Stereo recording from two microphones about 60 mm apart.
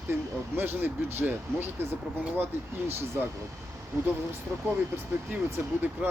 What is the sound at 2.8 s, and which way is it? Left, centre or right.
Speech, right.